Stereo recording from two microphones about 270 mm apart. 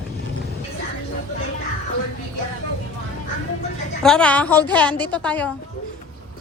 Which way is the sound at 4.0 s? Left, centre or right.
Centre.